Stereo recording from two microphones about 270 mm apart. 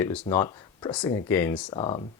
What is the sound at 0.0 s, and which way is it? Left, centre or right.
Speech, centre.